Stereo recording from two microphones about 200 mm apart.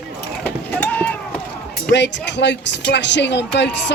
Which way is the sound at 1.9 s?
60° left (ahead or behind).